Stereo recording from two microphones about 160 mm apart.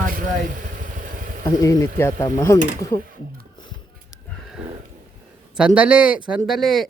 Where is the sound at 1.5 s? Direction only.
20° left (ahead or behind).